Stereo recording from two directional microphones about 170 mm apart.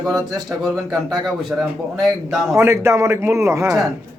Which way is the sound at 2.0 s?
5° right (ahead or behind).